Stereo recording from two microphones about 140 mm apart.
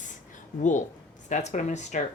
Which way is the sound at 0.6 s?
60° left (ahead or behind).